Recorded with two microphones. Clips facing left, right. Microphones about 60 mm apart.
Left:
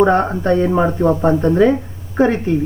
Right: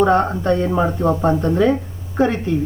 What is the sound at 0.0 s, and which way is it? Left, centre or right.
A woman's voice, left.